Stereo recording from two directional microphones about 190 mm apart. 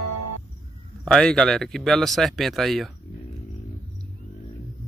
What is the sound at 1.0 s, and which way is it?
Speech, 5° left (ahead or behind).